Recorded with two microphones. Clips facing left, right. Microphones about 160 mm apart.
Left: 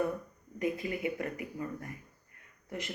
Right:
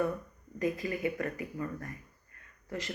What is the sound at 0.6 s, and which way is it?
Speech, 20° left (ahead or behind).